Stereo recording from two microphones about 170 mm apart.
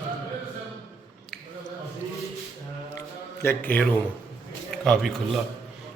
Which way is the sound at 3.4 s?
10° left (ahead or behind).